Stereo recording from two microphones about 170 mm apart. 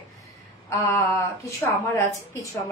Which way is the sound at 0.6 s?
15° left (ahead or behind).